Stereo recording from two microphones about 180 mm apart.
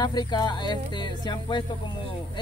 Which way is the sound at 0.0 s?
25° left (ahead or behind).